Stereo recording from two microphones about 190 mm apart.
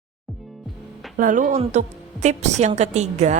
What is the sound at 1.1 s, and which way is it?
A woman's voice, 45° right (ahead or behind).